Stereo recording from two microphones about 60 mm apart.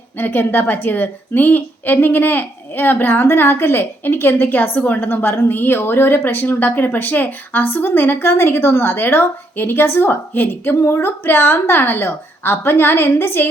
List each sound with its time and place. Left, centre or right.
0.2 s a woman's voice: left
8.1 s a woman's voice: left